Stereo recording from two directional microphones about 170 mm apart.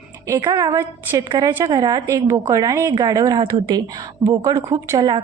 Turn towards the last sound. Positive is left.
turn(degrees=-25)  # may be behind; listen again after turning